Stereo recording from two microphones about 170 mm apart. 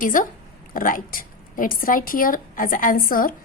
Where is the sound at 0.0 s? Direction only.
50° left (ahead or behind).